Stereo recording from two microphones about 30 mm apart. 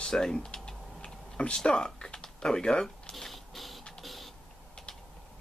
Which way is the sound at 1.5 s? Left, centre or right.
Left.